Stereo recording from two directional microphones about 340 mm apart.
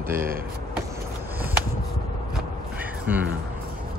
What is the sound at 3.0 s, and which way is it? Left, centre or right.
Speech, centre.